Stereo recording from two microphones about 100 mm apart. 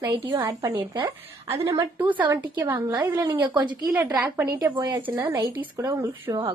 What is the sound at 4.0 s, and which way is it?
Speech, 35° right (ahead or behind).